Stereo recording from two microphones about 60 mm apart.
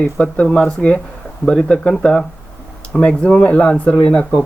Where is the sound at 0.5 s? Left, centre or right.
Centre.